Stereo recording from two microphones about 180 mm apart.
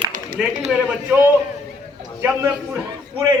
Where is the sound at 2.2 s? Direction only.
15° right (ahead or behind).